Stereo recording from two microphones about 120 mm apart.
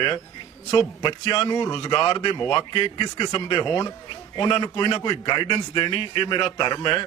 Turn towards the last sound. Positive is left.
turn(degrees=40)  # may be behind; listen again after turning